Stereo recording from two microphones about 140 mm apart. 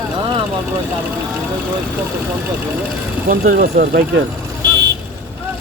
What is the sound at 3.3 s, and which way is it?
Speech, 90° right.